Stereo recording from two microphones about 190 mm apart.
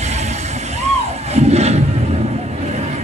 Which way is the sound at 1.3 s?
35° right (ahead or behind).